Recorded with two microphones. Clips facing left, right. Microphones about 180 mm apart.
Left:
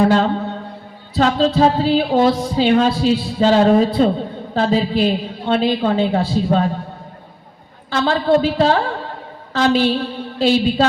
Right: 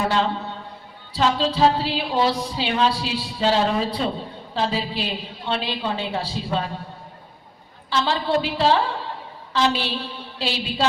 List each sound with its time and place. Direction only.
0.1 s a sound: 50° left (ahead or behind)
1.1 s speech: 45° left (ahead or behind)
7.9 s speech: 50° left (ahead or behind)